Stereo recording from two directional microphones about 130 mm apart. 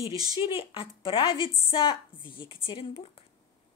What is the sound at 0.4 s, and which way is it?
A woman's voice, 40° left (ahead or behind).